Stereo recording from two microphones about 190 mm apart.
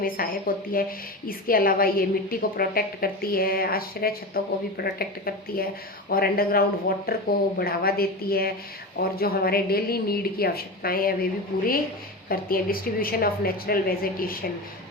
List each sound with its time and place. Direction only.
0.0 s a woman's voice: 50° left (ahead or behind)